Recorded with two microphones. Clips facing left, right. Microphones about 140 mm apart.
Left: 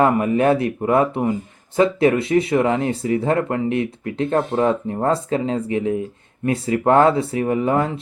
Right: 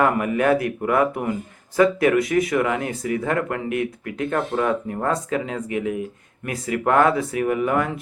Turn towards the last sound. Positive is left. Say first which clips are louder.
# left 2 dB
turn(degrees=25)  # may be behind; listen again after turning